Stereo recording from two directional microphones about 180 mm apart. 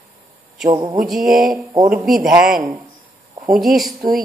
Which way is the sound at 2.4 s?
50° right (ahead or behind).